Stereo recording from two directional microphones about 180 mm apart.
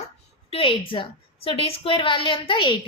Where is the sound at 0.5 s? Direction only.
30° left (ahead or behind).